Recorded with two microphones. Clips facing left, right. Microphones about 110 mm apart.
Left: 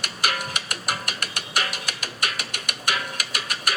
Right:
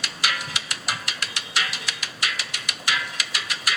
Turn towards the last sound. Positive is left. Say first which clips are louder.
# left 1 dB
turn(degrees=50)  # may be behind; listen again after turning